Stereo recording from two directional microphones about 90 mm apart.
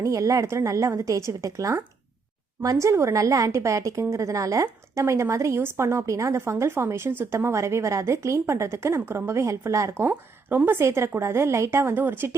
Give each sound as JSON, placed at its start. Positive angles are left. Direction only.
{"t": 0.0, "sound": "a woman's voice", "side_deg": -40}
{"t": 10.0, "sound": "a woman's voice", "side_deg": -20}